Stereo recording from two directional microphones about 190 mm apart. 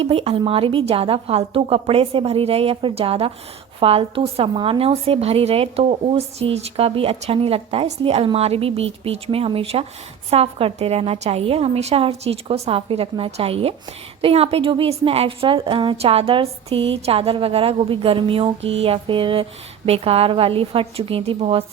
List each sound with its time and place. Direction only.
0.0 s a woman's voice: 30° right (ahead or behind)